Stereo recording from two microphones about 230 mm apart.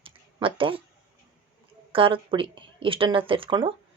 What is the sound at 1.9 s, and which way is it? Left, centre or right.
Speech, right.